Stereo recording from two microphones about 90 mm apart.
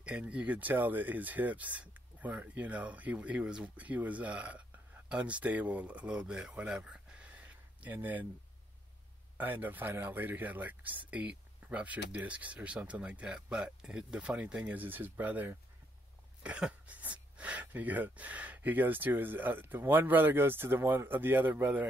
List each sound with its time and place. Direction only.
0.0 s speech: 15° right (ahead or behind)
9.4 s speech: 20° right (ahead or behind)